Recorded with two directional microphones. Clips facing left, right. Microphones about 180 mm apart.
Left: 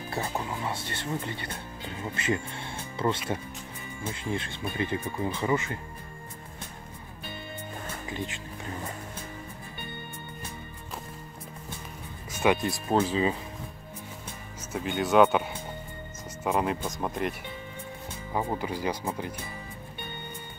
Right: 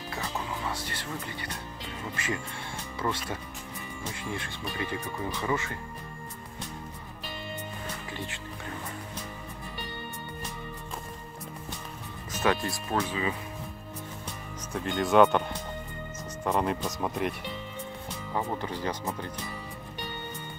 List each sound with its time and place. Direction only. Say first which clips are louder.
0.1 s speech: left 3 dB; 25° left (ahead or behind)
8.1 s speech: left 3 dB; 15° left (ahead or behind)
12.3 s music: left 3 dB; 15° left (ahead or behind)
12.9 s speech: left 5 dB; 30° left (ahead or behind)
14.7 s speech: even; 5° left (ahead or behind)
18.3 s speech: left 2 dB; 10° left (ahead or behind)